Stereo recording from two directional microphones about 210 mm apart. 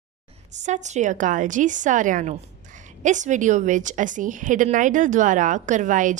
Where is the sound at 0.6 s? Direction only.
35° right (ahead or behind).